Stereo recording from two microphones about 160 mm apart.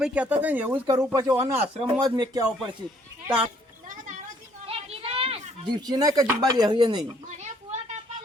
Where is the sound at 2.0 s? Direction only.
25° right (ahead or behind).